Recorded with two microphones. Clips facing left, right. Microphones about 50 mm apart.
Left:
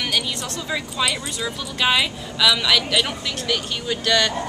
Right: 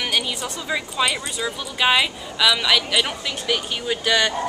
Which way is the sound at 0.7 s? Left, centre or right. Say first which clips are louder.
Right 2 dB; centre.